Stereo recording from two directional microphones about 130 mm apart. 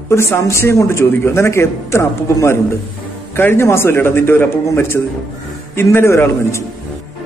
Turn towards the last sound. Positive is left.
turn(degrees=20)  # may be behind; listen again after turning